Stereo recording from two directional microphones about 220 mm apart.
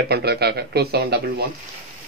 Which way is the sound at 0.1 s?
45° right (ahead or behind).